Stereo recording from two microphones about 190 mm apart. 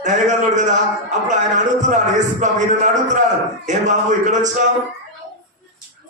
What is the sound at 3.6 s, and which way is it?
Speech, 40° right (ahead or behind).